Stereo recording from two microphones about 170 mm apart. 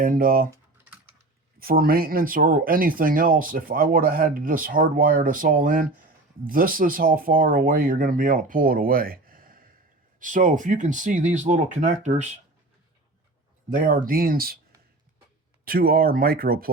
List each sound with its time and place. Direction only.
0.0 s speech: 55° right (ahead or behind)
1.5 s speech: 60° right (ahead or behind); by 12.4 s 40° right (ahead or behind)
13.7 s speech: 55° right (ahead or behind)
15.6 s speech: 60° right (ahead or behind)